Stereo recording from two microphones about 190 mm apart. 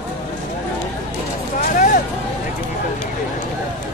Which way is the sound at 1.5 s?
45° left (ahead or behind).